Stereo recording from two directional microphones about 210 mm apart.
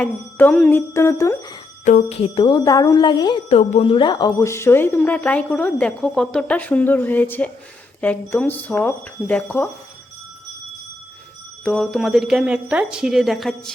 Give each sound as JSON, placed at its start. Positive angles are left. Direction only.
{"t": 0.0, "sound": "a woman's voice", "side_deg": 5}
{"t": 1.8, "sound": "a woman's voice", "side_deg": 35}
{"t": 11.6, "sound": "speech", "side_deg": 0}